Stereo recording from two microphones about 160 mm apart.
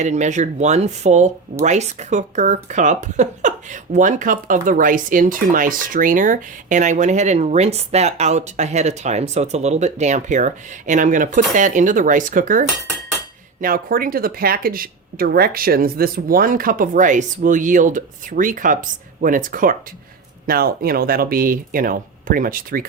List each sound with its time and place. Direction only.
0.0 s speech: 45° right (ahead or behind)
20.5 s speech: 70° right (ahead or behind)